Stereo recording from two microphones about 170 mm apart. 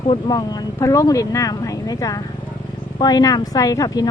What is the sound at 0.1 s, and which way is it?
Speech, 25° left (ahead or behind).